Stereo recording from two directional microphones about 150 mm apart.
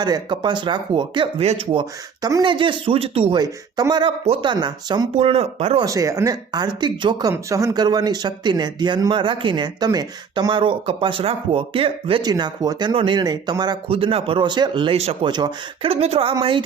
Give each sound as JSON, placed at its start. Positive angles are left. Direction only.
{"t": 0.0, "sound": "speech", "side_deg": -30}
{"t": 2.2, "sound": "speech", "side_deg": -30}
{"t": 5.1, "sound": "speech", "side_deg": -40}
{"t": 5.8, "sound": "speech", "side_deg": -20}
{"t": 13.8, "sound": "speech", "side_deg": -40}
{"t": 15.3, "sound": "speech", "side_deg": -30}
{"t": 15.9, "sound": "speech", "side_deg": -45}